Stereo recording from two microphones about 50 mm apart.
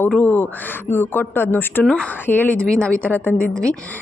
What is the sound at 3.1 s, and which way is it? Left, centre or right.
Speech, left.